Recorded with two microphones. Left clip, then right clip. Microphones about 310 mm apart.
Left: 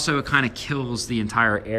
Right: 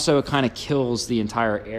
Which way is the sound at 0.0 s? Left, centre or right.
Centre.